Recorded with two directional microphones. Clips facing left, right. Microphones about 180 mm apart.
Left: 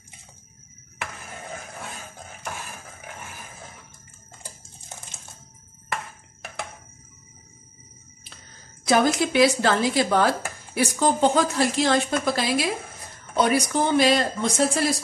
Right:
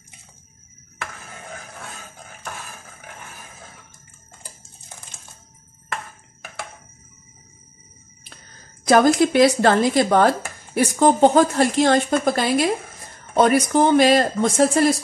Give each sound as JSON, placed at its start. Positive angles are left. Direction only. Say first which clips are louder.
{"t": 8.8, "sound": "speech", "louder": "right 5 dB", "side_deg": -50}